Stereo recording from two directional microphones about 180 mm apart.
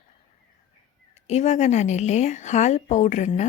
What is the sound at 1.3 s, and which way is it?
A woman's voice, 40° left (ahead or behind).